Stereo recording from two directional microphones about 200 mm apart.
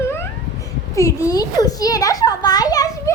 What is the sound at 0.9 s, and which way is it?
A child's voice, 15° left (ahead or behind).